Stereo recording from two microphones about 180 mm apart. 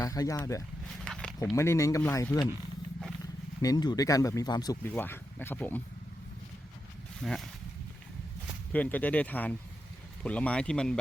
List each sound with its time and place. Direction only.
0.0 s speech: 20° left (ahead or behind)
1.0 s a sound: 5° left (ahead or behind)
1.5 s speech: 15° left (ahead or behind)
3.6 s speech: 20° left (ahead or behind)
4.8 s speech: 10° left (ahead or behind)
7.2 s speech: 5° left (ahead or behind)
8.7 s speech: 10° left (ahead or behind)